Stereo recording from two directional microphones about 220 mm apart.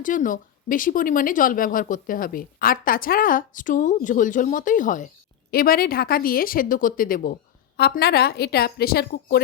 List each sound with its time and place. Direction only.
0.0 s a woman's voice: 35° left (ahead or behind)